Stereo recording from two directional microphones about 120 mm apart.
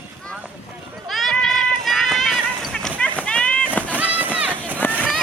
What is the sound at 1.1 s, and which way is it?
Run, 5° left (ahead or behind).